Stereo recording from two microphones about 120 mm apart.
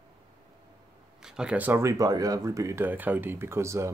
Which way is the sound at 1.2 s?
5° right (ahead or behind).